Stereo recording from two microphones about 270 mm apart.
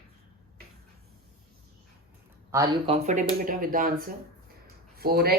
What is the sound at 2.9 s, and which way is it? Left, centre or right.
Speech, right.